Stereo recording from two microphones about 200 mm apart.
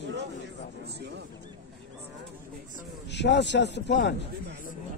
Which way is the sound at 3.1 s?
60° left (ahead or behind).